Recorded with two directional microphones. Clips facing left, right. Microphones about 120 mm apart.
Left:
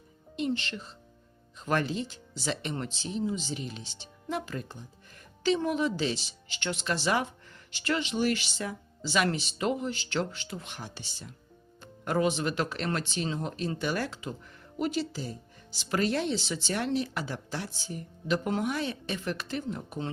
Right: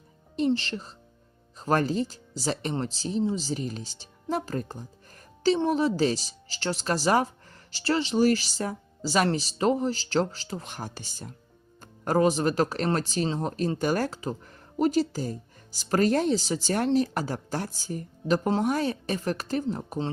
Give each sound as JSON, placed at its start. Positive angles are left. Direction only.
{"t": 0.3, "sound": "speech", "side_deg": -35}